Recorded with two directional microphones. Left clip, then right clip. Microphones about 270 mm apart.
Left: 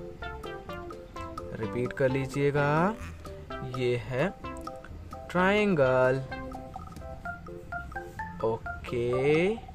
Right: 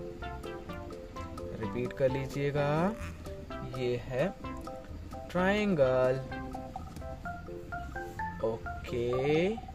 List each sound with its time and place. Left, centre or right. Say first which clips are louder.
0.2 s music: left 2 dB; centre
1.9 s speech: left 2 dB; centre
5.3 s speech: left 5 dB; centre
8.4 s speech: left 6 dB; centre